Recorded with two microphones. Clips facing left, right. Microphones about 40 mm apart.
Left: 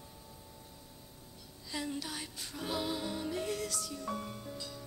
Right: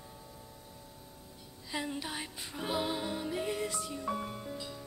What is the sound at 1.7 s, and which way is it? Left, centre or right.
Music, right.